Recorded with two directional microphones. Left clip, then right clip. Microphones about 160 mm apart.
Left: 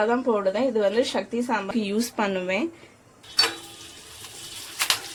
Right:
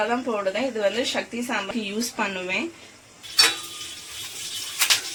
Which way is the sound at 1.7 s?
75° left (ahead or behind).